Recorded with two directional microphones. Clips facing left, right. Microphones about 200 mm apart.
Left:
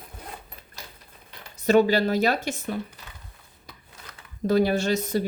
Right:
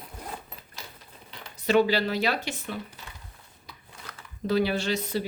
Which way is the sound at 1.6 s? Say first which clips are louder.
Left 3 dB; 45° left (ahead or behind).